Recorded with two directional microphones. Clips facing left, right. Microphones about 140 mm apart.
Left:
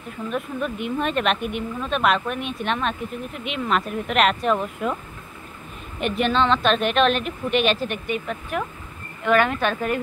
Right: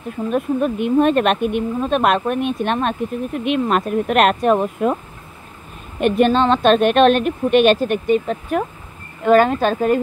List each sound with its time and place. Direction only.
0.3 s speech: 40° right (ahead or behind)
5.9 s speech: 45° right (ahead or behind)